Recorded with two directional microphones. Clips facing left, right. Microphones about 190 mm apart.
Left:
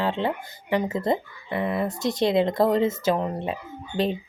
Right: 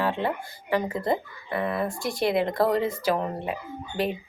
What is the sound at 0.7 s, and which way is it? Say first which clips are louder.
Speech: left 2 dB; 20° left (ahead or behind).